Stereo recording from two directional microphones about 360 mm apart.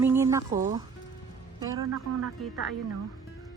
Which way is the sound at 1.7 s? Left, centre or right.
Right.